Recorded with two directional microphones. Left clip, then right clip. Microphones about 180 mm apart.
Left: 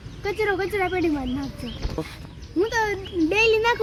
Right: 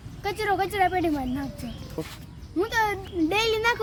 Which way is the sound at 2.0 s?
10° left (ahead or behind).